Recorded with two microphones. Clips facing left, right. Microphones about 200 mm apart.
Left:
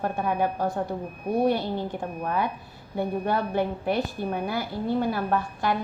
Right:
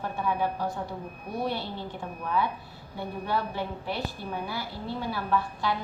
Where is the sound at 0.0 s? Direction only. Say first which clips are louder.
Left 3 dB; 55° left (ahead or behind).